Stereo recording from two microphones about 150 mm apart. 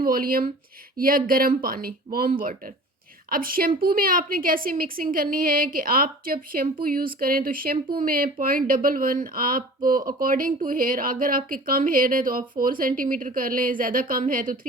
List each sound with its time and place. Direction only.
0.0 s a woman's voice: 75° right (ahead or behind)